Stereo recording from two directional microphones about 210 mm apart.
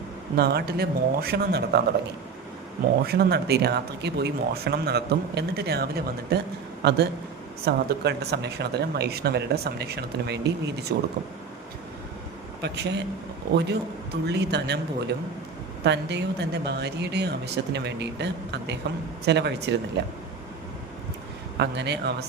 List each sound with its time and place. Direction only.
0.3 s speech: 50° right (ahead or behind)
3.1 s speech: 50° right (ahead or behind)
12.6 s speech: 55° right (ahead or behind)
14.3 s speech: 55° right (ahead or behind)
21.6 s speech: 55° right (ahead or behind)